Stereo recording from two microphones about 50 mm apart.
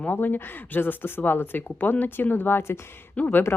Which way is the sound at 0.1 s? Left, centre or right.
Left.